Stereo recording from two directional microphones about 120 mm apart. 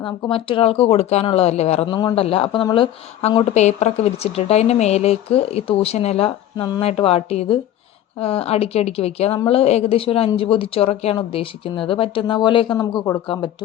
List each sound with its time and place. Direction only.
0.0 s speech: 45° left (ahead or behind); by 1.9 s 60° left (ahead or behind)
1.9 s speech: 40° left (ahead or behind)
2.1 s a woman's voice: 50° left (ahead or behind)
3.5 s a woman's voice: 70° left (ahead or behind); by 13.1 s 30° left (ahead or behind)
13.2 s a woman's voice: 45° left (ahead or behind)